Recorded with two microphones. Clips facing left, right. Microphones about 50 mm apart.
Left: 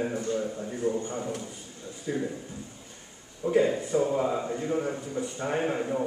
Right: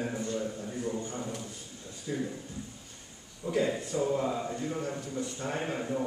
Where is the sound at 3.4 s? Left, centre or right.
Centre.